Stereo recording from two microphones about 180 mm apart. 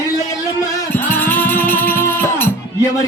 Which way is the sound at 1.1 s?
10° left (ahead or behind).